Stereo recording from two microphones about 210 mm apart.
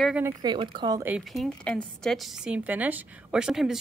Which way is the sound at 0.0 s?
5° right (ahead or behind).